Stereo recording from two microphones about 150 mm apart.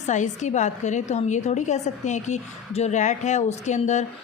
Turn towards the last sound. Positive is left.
turn(degrees=50)  # may be behind; listen again after turning